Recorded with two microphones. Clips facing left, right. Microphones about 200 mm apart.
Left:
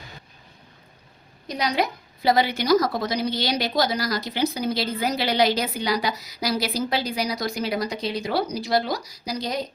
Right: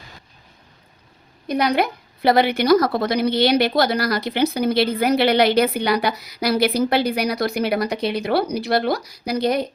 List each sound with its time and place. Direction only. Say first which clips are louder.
1.5 s a woman's voice: right 5 dB; 55° right (ahead or behind)